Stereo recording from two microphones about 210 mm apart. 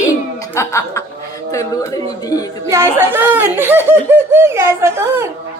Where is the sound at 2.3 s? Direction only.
15° left (ahead or behind).